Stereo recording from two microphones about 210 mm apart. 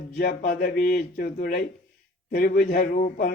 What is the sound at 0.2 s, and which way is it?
A man's voice, 45° left (ahead or behind).